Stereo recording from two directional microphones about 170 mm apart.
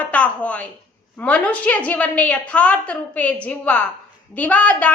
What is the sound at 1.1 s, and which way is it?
A woman's voice, 10° left (ahead or behind).